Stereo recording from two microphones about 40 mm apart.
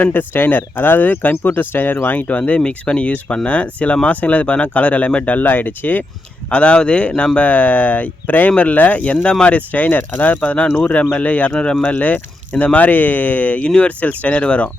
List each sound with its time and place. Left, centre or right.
0.0 s speech: left
2.6 s speech: left
6.5 s speech: left
7.3 s speech: left
9.7 s speech: left
11.5 s speech: left
11.8 s speech: left
13.7 s speech: left
14.0 s speech: left